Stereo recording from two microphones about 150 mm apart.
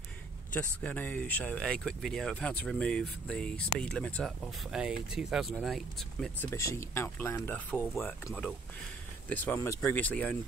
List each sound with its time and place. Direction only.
0.5 s speech: 10° left (ahead or behind)
4.7 s speech: 5° right (ahead or behind)
6.4 s speech: 20° left (ahead or behind)
7.9 s speech: centre (ahead or behind)